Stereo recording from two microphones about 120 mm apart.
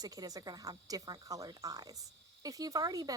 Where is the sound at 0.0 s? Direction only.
30° right (ahead or behind).